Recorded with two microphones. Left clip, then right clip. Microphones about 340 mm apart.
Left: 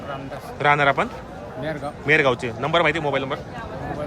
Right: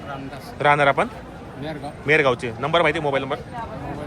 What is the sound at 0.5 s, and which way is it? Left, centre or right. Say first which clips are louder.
A man's voice: right 1 dB; centre.